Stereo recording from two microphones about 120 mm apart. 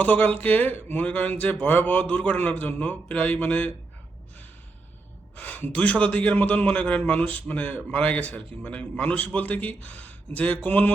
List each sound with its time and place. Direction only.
0.0 s a man's voice: 15° left (ahead or behind)
5.4 s a man's voice: 15° left (ahead or behind)